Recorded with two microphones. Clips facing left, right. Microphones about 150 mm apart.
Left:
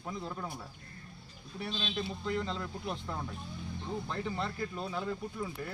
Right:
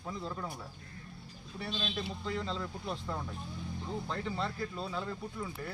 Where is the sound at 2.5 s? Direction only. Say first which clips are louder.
Even; 5° left (ahead or behind).